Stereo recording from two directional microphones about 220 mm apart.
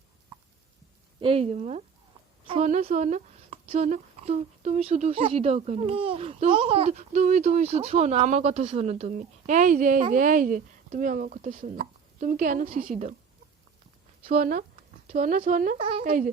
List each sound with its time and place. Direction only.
1.2 s a woman's voice: 25° right (ahead or behind)
14.3 s a woman's voice: 40° right (ahead or behind)
15.8 s speech: 25° right (ahead or behind)
16.0 s a woman's voice: 35° right (ahead or behind)